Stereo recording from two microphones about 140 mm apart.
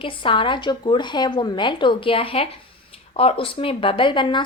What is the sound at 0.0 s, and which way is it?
Speech, 35° left (ahead or behind).